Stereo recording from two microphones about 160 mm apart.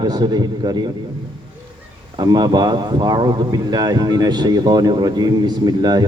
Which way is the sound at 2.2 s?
25° right (ahead or behind).